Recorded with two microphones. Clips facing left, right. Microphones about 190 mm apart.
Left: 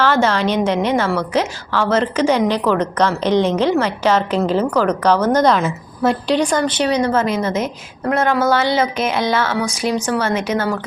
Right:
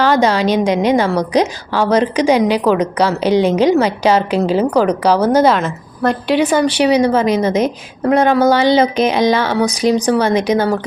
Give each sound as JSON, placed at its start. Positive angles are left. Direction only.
{"t": 0.0, "sound": "a woman's voice", "side_deg": -15}